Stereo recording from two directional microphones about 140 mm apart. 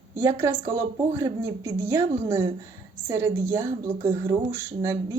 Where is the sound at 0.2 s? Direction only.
20° right (ahead or behind).